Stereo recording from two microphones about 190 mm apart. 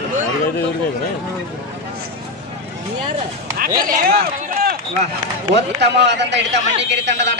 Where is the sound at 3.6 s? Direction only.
50° right (ahead or behind).